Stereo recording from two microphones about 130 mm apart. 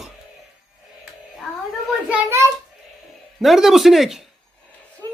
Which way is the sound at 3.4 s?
Centre (ahead or behind).